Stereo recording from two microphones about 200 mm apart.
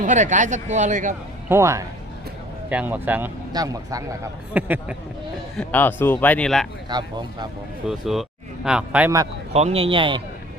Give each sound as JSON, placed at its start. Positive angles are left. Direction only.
{"t": 0.0, "sound": "speech", "side_deg": -40}
{"t": 1.5, "sound": "a man's voice", "side_deg": -15}
{"t": 5.5, "sound": "a man's voice", "side_deg": 10}
{"t": 6.8, "sound": "a man's voice", "side_deg": -20}
{"t": 7.9, "sound": "speech", "side_deg": 0}
{"t": 9.5, "sound": "a man's voice", "side_deg": -30}